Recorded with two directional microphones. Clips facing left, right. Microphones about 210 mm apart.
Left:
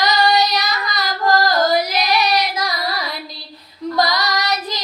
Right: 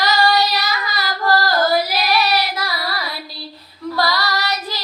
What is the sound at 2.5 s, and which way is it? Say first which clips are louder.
Carnatic music: left 2 dB; 20° left (ahead or behind).